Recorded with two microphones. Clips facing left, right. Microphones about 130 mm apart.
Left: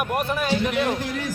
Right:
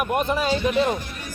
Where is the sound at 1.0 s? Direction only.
90° left.